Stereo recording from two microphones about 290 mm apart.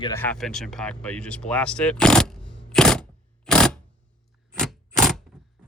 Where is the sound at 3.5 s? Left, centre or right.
Centre.